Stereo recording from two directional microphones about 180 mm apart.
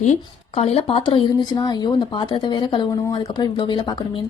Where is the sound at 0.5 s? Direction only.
35° left (ahead or behind).